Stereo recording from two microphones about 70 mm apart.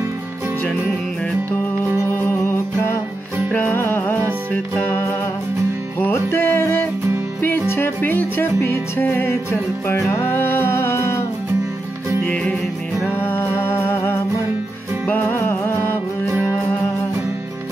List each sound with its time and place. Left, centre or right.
2.0 s music: left
13.1 s music: left
15.0 s music: left